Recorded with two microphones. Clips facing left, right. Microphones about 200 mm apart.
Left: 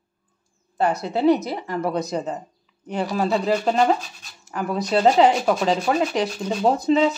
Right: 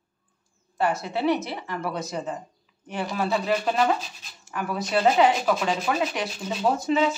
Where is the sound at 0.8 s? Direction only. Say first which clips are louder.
Left 5 dB; 35° left (ahead or behind).